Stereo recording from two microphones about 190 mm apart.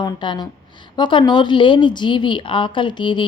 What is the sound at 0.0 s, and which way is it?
Speech, 25° left (ahead or behind).